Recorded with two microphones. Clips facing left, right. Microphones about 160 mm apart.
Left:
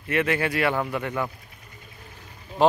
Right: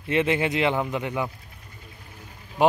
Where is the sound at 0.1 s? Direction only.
20° right (ahead or behind).